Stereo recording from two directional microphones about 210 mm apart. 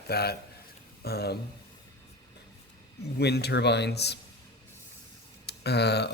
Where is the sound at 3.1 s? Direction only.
50° left (ahead or behind).